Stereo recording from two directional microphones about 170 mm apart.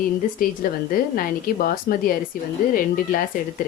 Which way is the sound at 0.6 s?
60° left (ahead or behind).